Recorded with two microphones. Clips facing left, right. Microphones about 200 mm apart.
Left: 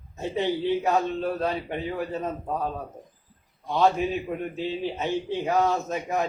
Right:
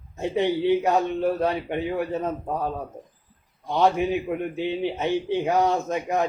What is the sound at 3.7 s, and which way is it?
A man's voice, 20° right (ahead or behind).